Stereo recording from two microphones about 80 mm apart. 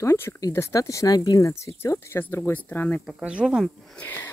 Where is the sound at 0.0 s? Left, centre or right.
Left.